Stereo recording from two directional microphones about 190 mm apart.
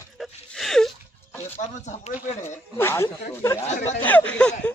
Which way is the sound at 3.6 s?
35° left (ahead or behind).